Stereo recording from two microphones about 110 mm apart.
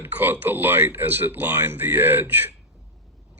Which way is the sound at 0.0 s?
20° right (ahead or behind).